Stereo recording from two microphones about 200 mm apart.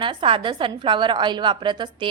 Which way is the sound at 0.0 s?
25° right (ahead or behind).